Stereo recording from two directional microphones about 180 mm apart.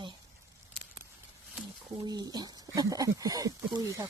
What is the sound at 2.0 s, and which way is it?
Speech, 20° right (ahead or behind).